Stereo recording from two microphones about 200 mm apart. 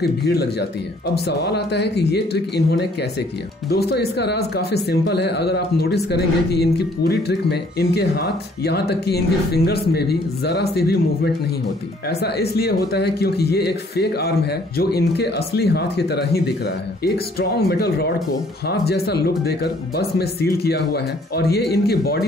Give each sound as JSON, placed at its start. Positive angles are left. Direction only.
{"t": 0.0, "sound": "speech", "side_deg": 55}
{"t": 12.1, "sound": "speech", "side_deg": 55}